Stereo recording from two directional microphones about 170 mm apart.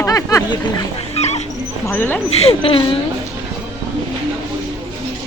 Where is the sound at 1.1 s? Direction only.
40° left (ahead or behind).